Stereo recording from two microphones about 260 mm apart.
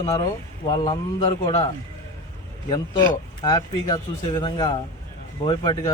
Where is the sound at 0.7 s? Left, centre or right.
Centre.